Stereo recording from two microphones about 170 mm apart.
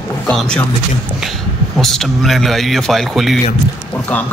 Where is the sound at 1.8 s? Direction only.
Centre (ahead or behind).